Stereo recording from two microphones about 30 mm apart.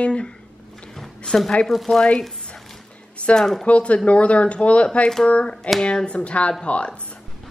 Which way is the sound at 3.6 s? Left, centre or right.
Left.